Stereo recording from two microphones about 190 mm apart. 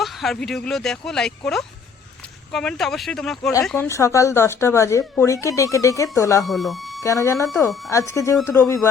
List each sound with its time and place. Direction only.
0.0 s speech: centre (ahead or behind)
3.7 s speech: 15° left (ahead or behind)
6.4 s speech: centre (ahead or behind)
7.0 s speech: 15° left (ahead or behind)